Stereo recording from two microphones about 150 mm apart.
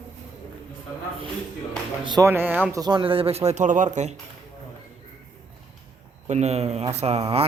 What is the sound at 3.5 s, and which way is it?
Speech, 55° right (ahead or behind).